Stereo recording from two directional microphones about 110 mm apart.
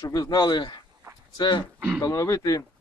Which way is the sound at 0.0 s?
35° left (ahead or behind).